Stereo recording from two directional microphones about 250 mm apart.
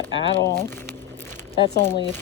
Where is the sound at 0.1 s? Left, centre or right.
Left.